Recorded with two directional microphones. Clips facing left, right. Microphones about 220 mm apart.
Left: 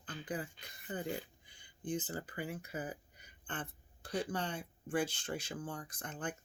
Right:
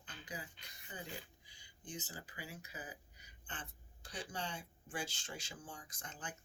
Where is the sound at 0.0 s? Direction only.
55° left (ahead or behind).